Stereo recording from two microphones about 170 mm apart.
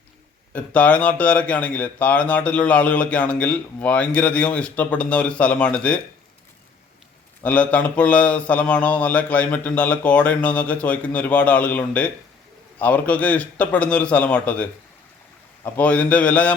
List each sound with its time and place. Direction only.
0.5 s speech: 10° left (ahead or behind)
7.4 s speech: 10° left (ahead or behind)